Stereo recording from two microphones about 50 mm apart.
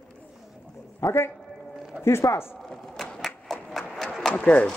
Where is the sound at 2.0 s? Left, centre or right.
Left.